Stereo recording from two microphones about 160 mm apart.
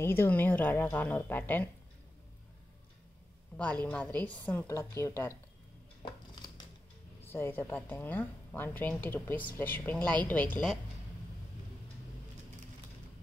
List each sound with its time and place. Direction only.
0.0 s a woman's voice: 15° left (ahead or behind)
3.8 s a woman's voice: 10° left (ahead or behind)
7.2 s a woman's voice: 15° left (ahead or behind)